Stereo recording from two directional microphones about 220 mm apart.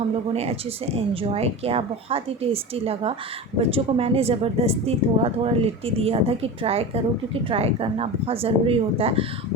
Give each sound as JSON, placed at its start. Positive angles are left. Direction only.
{"t": 1.1, "sound": "a woman's voice", "side_deg": -25}